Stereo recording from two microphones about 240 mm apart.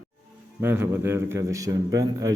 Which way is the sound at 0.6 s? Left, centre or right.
Centre.